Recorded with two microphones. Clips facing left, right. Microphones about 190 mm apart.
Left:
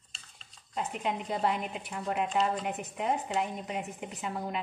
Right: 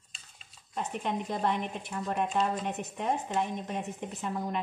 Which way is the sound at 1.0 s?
10° left (ahead or behind).